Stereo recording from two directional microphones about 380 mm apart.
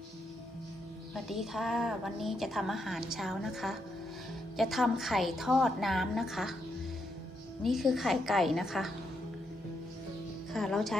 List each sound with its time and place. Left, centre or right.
1.1 s a woman's voice: centre
7.6 s a woman's voice: centre
10.5 s a woman's voice: centre